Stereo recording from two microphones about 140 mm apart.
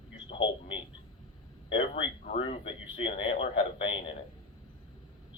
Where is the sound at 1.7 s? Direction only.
40° left (ahead or behind).